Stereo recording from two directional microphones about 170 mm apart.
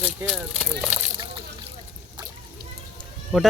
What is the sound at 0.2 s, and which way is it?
Speech, 5° right (ahead or behind).